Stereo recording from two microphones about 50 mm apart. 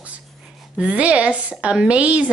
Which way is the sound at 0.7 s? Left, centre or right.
Right.